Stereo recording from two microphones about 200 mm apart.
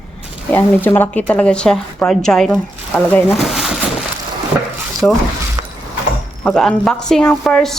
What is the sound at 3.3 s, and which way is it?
Speech, centre (ahead or behind).